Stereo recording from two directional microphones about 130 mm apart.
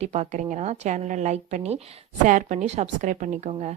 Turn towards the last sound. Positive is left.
turn(degrees=-60)  # may be behind; listen again after turning